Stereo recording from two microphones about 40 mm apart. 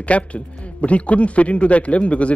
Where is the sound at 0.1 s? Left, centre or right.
Left.